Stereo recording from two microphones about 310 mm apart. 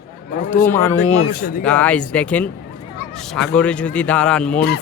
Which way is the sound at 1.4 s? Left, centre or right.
Left.